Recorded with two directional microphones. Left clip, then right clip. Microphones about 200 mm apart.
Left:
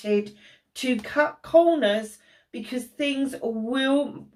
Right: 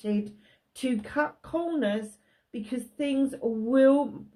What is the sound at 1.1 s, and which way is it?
Speech, 45° right (ahead or behind).